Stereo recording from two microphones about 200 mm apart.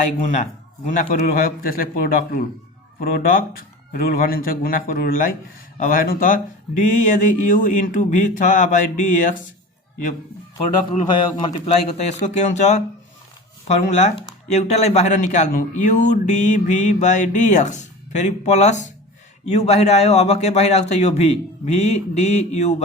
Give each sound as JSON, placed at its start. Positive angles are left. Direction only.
{"t": 0.2, "sound": "speech", "side_deg": 35}
{"t": 3.0, "sound": "speech", "side_deg": 50}
{"t": 11.0, "sound": "speech", "side_deg": 25}